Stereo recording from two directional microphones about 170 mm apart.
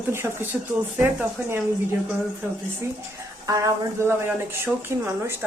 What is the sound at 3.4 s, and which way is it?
Speech, 20° right (ahead or behind).